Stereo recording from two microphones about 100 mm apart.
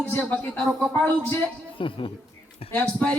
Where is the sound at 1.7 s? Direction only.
60° left (ahead or behind).